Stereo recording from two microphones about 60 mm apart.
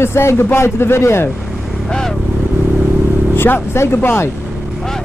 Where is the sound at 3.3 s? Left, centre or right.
Left.